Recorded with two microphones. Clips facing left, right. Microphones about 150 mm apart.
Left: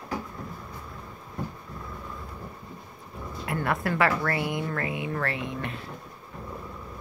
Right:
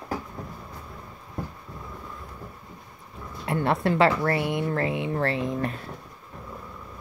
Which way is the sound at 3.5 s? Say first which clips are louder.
Right 4 dB; 25° right (ahead or behind).